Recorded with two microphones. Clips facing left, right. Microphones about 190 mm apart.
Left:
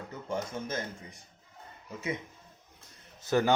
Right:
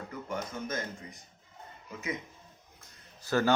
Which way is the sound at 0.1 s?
25° left (ahead or behind).